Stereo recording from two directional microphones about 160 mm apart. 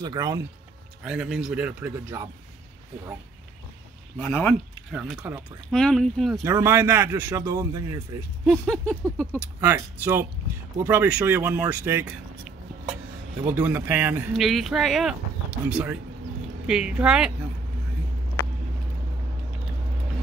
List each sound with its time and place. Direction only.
0.0 s a man's voice: 25° right (ahead or behind)
1.0 s speech: 5° right (ahead or behind)
4.2 s speech: 10° left (ahead or behind)
5.2 s speech: 10° right (ahead or behind)
5.7 s speech: 5° left (ahead or behind)
6.4 s a man's voice: 15° right (ahead or behind)
8.5 s speech: 5° left (ahead or behind)
9.6 s speech: 15° right (ahead or behind)
13.5 s speech: 10° right (ahead or behind)
14.3 s speech: centre (ahead or behind)